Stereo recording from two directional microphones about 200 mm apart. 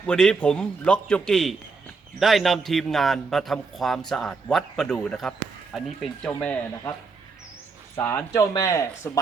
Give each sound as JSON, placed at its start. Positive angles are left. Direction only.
{"t": 0.1, "sound": "a man's voice", "side_deg": 5}
{"t": 7.9, "sound": "speech", "side_deg": 10}